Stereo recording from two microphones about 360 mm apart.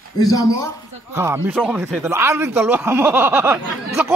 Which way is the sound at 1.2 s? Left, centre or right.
Centre.